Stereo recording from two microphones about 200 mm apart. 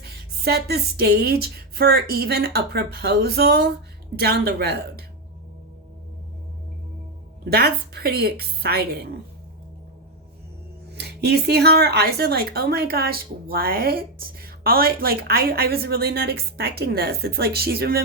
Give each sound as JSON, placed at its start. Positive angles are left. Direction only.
{"t": 0.0, "sound": "speech", "side_deg": -55}
{"t": 7.5, "sound": "speech", "side_deg": -50}
{"t": 10.9, "sound": "speech", "side_deg": -55}